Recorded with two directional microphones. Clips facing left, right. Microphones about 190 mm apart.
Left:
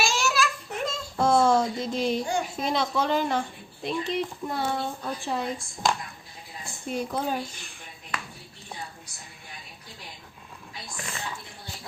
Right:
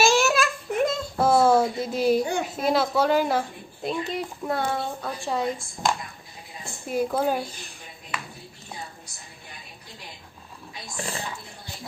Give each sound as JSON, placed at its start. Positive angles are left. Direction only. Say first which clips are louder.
{"t": 0.0, "sound": "a sound", "louder": "right 6 dB", "side_deg": -50}
{"t": 1.2, "sound": "speech", "louder": "right 2 dB", "side_deg": -5}
{"t": 2.2, "sound": "a child's voice", "louder": "right 1 dB", "side_deg": -60}
{"t": 2.6, "sound": "a woman's voice", "louder": "right 6 dB", "side_deg": -5}
{"t": 10.9, "sound": "speech", "louder": "right 7 dB", "side_deg": -30}